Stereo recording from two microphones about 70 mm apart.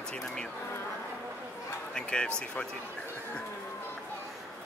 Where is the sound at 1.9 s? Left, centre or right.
Centre.